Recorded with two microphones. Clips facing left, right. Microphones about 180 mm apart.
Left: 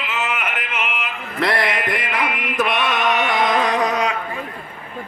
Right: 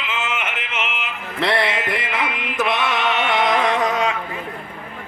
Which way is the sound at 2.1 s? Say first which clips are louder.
Left 3 dB; 25° right (ahead or behind).